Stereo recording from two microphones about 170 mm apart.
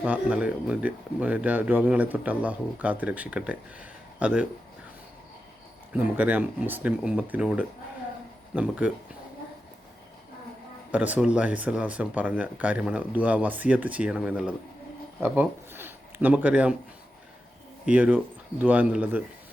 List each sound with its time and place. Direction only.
0.0 s speech: 5° right (ahead or behind)
5.9 s speech: 10° right (ahead or behind)
10.9 s speech: 10° right (ahead or behind)
17.8 s speech: 10° right (ahead or behind)